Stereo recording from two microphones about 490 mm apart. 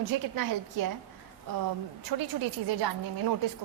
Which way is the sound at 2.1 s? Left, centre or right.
Right.